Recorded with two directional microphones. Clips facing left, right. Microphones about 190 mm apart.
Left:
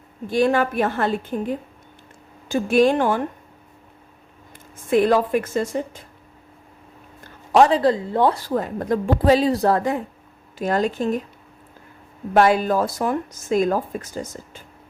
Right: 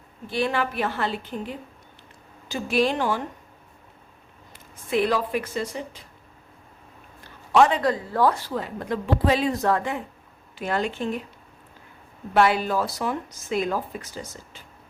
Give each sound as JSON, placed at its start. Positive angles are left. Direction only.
{"t": 0.3, "sound": "speech", "side_deg": 45}
{"t": 4.5, "sound": "speech", "side_deg": 45}
{"t": 7.3, "sound": "speech", "side_deg": 35}
{"t": 8.4, "sound": "a woman's voice", "side_deg": 45}
{"t": 12.3, "sound": "speech", "side_deg": 45}